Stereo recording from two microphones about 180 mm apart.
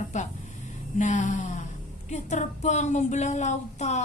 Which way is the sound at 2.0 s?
40° left (ahead or behind).